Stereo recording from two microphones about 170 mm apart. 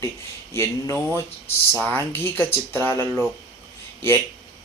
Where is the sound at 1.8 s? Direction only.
10° left (ahead or behind).